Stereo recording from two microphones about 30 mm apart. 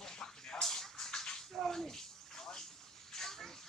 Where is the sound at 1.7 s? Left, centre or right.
Centre.